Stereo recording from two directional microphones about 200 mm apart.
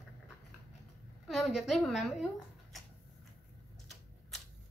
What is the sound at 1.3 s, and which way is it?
A woman's voice, centre (ahead or behind).